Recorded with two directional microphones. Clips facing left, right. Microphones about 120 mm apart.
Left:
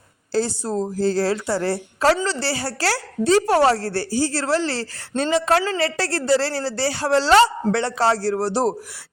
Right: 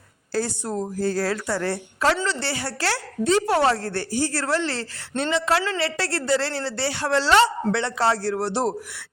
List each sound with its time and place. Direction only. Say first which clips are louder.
0.3 s a woman's voice: left 4 dB; 30° left (ahead or behind)